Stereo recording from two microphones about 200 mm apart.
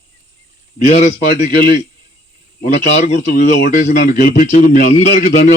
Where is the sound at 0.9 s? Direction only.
40° left (ahead or behind).